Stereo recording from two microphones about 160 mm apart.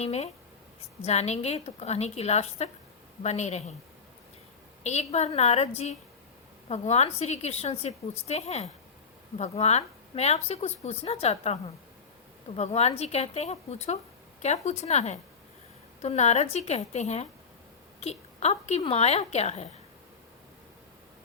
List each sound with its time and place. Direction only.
0.0 s a woman's voice: 40° left (ahead or behind)
4.8 s a woman's voice: 45° left (ahead or behind)
12.5 s a woman's voice: 40° left (ahead or behind)